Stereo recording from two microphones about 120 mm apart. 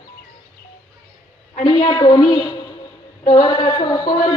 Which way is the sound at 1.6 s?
40° left (ahead or behind).